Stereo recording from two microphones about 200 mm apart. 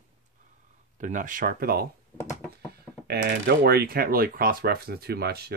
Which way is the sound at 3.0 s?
55° right (ahead or behind).